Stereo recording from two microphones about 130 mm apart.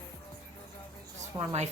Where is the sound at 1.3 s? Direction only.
15° right (ahead or behind).